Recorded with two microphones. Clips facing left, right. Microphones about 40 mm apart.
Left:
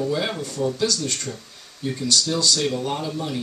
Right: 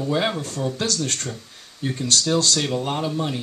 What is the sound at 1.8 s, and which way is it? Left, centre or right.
Speech, right.